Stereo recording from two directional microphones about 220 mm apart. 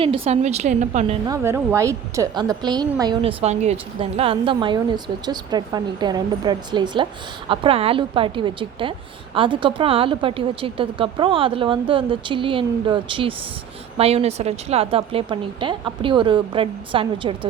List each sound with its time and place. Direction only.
0.0 s a woman's voice: 25° right (ahead or behind)
1.3 s a woman's voice: 10° right (ahead or behind)